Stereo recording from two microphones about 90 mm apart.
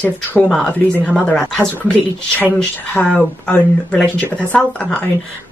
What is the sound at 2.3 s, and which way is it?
Speech, 15° left (ahead or behind).